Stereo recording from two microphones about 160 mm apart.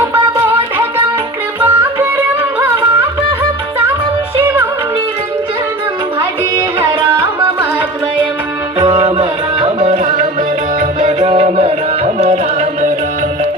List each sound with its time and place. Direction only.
0.0 s music: 15° right (ahead or behind)
1.6 s music: 10° right (ahead or behind)
9.0 s music: 30° right (ahead or behind)
9.8 s music: 50° right (ahead or behind)